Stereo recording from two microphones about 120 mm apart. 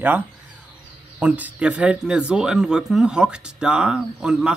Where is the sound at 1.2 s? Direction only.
10° right (ahead or behind).